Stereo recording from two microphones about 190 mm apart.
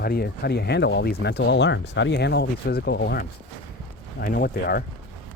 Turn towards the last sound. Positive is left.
turn(degrees=55)  # may be behind; listen again after turning